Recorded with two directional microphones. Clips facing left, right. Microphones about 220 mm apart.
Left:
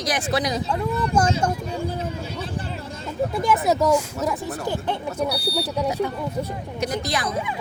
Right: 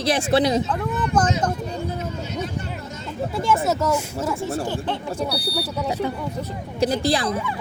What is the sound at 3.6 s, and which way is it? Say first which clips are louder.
Speech: left 2 dB; 15° left (ahead or behind).